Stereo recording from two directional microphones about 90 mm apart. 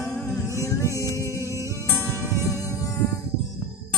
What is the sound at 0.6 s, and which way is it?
Music, 35° left (ahead or behind).